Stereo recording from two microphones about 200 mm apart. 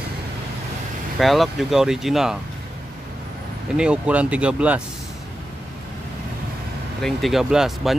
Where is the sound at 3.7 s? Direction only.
5° right (ahead or behind).